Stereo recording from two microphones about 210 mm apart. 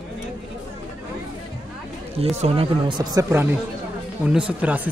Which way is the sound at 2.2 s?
30° right (ahead or behind).